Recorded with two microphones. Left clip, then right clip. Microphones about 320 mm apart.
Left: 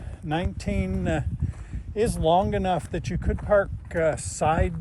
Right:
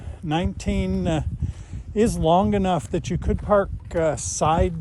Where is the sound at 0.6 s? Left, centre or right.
Centre.